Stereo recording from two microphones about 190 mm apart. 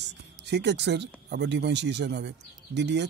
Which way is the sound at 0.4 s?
65° right (ahead or behind).